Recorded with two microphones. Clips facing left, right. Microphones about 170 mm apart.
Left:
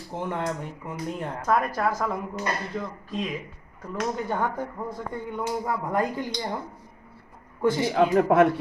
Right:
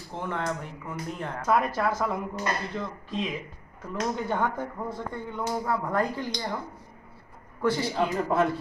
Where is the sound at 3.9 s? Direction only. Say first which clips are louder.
Left 1 dB; 5° left (ahead or behind).